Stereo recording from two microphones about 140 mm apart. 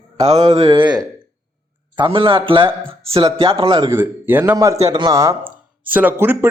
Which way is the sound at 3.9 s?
15° right (ahead or behind).